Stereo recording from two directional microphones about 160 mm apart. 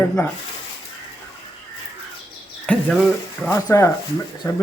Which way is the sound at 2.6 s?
5° left (ahead or behind).